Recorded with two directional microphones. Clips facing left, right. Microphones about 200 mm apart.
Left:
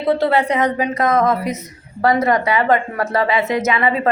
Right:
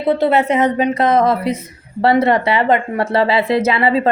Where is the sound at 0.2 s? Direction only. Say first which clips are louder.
Right 2 dB; 20° right (ahead or behind).